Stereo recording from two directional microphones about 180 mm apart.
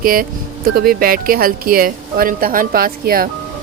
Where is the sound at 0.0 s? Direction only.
55° right (ahead or behind).